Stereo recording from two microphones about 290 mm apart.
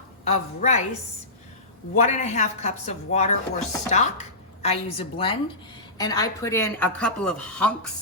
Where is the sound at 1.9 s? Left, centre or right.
Left.